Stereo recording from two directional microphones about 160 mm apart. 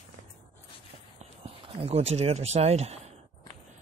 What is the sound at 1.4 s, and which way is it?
Speech, 40° right (ahead or behind).